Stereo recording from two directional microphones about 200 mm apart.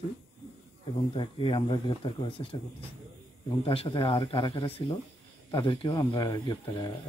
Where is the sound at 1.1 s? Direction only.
25° left (ahead or behind).